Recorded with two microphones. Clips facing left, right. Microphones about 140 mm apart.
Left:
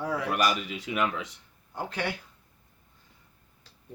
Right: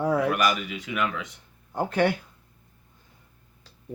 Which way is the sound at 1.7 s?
50° right (ahead or behind).